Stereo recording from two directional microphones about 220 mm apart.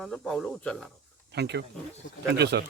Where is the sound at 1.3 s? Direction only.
50° right (ahead or behind).